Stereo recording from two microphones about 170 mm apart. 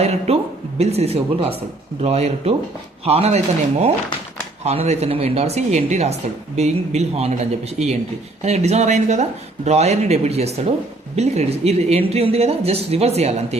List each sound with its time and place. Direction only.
0.0 s speech: 40° right (ahead or behind)